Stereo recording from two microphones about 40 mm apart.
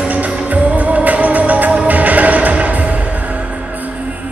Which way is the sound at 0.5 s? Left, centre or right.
Right.